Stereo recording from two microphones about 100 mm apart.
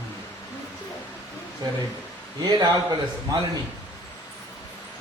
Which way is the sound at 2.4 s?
45° right (ahead or behind).